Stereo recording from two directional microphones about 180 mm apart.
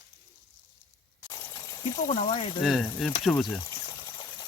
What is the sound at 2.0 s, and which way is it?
Speech, 40° left (ahead or behind).